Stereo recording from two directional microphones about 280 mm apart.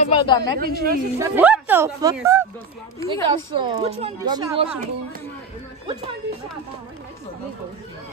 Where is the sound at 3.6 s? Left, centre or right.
Centre.